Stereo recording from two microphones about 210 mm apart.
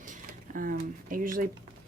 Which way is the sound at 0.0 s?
40° right (ahead or behind).